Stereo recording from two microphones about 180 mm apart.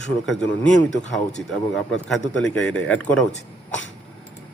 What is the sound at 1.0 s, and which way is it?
Speech, 40° left (ahead or behind).